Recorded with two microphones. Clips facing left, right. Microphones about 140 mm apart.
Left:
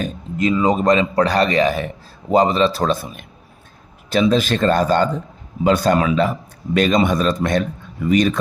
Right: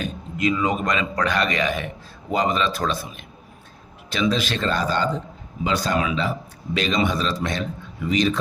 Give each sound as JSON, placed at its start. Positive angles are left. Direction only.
{"t": 0.0, "sound": "a man's voice", "side_deg": 35}